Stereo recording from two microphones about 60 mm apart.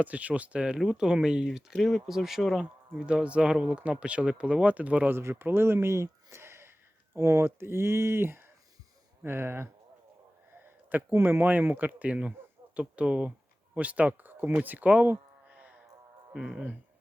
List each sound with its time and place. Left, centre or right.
0.0 s speech: right
1.7 s speech: centre
2.9 s speech: centre
5.1 s speech: right
11.1 s speech: right
12.0 s speech: right
15.4 s a sound: right
16.3 s speech: centre